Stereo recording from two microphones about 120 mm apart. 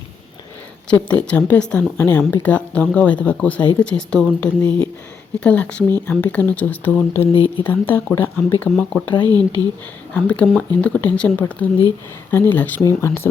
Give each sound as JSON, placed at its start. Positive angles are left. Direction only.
{"t": 0.9, "sound": "speech", "side_deg": 10}
{"t": 9.2, "sound": "speech", "side_deg": -35}
{"t": 10.2, "sound": "speech", "side_deg": 10}